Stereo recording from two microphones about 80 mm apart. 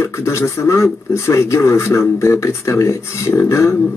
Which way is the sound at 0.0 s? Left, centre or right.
Left.